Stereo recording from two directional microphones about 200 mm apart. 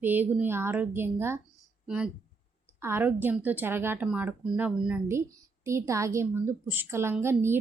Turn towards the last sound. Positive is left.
turn(degrees=-10)  # may be behind; listen again after turning